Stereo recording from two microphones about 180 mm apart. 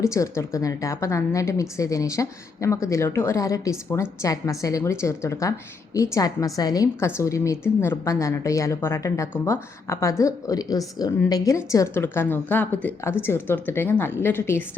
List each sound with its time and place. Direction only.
0.0 s a woman's voice: 15° left (ahead or behind)